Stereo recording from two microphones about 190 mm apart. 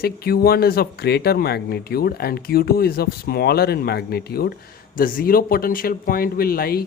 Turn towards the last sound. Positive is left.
turn(degrees=55)  # may be behind; listen again after turning